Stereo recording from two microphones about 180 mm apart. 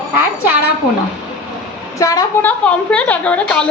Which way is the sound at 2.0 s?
20° left (ahead or behind).